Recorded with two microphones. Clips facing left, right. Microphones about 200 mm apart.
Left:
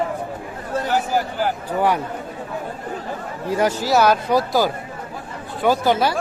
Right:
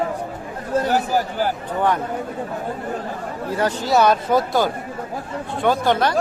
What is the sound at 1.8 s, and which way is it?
Speech, 10° left (ahead or behind).